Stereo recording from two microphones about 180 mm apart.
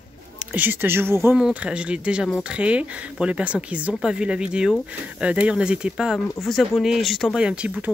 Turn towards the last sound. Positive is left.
turn(degrees=-5)  # may be behind; listen again after turning